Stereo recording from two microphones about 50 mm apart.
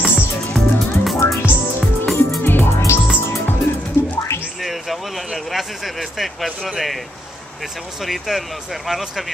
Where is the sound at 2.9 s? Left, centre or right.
Left.